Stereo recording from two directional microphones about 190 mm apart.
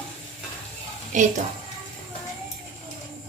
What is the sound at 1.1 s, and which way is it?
Speech, 40° right (ahead or behind).